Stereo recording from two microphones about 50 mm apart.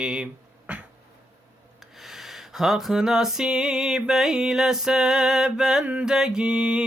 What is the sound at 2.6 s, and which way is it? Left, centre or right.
Music, centre.